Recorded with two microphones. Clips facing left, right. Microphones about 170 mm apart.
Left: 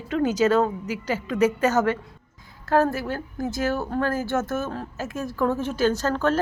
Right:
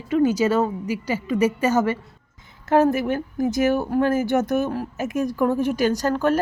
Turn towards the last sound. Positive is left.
turn(degrees=-15)  # may be behind; listen again after turning